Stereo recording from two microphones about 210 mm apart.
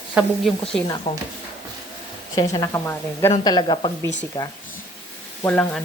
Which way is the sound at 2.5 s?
15° left (ahead or behind).